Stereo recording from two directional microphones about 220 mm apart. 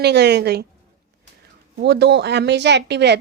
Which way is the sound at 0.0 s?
50° right (ahead or behind).